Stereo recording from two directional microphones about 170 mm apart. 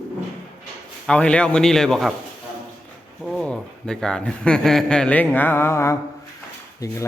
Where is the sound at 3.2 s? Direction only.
5° left (ahead or behind).